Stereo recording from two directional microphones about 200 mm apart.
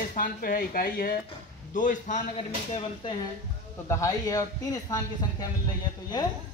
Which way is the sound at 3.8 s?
15° left (ahead or behind).